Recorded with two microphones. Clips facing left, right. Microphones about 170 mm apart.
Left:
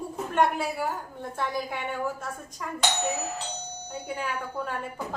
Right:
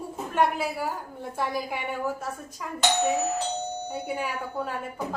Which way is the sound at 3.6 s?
45° right (ahead or behind).